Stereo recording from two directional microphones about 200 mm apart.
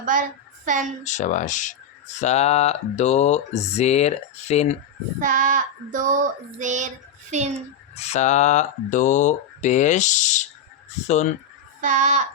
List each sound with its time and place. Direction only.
0.0 s a woman's voice: 40° right (ahead or behind)
1.0 s speech: 35° left (ahead or behind)
5.2 s child singing: 40° right (ahead or behind)
7.9 s speech: 35° left (ahead or behind)
11.8 s child singing: 40° right (ahead or behind)